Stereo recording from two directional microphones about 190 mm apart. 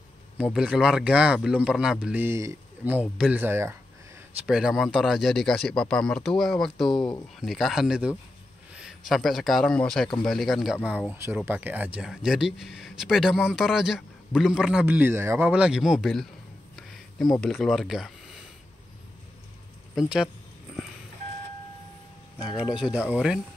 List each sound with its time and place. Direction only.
0.4 s a man's voice: 5° right (ahead or behind)
16.7 s a sound: centre (ahead or behind)
17.4 s speech: centre (ahead or behind)
20.0 s speech: 5° right (ahead or behind)
22.4 s speech: 5° right (ahead or behind)